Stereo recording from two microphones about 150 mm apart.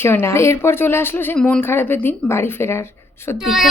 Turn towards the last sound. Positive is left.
turn(degrees=0)  # may be behind; listen again after turning